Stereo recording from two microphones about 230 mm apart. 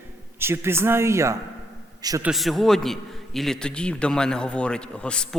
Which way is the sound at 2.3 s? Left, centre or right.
Centre.